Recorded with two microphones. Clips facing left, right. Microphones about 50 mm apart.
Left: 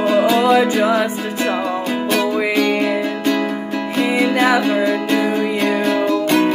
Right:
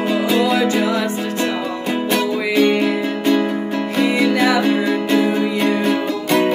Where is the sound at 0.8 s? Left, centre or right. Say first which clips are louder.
Left 3 dB; left.